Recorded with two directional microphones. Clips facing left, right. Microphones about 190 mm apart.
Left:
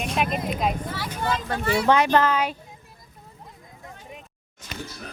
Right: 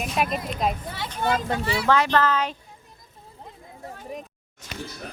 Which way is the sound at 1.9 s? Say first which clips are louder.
Left 1 dB; 20° left (ahead or behind).